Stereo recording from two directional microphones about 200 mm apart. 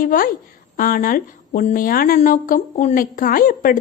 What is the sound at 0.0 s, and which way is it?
A woman's voice, 45° left (ahead or behind).